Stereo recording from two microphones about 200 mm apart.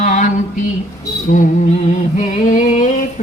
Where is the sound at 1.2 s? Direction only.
40° left (ahead or behind).